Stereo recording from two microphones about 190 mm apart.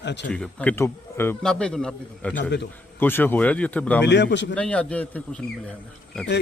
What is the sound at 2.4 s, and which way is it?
Speech, 65° left (ahead or behind).